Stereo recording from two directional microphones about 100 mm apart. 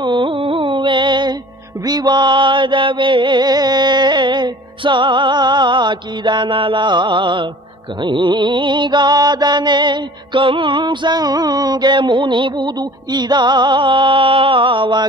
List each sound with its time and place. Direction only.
0.0 s carnatic music: 50° right (ahead or behind)
1.9 s mantra: 45° right (ahead or behind)